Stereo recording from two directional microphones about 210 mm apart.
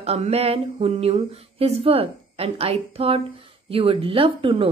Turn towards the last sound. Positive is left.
turn(degrees=-25)  # may be behind; listen again after turning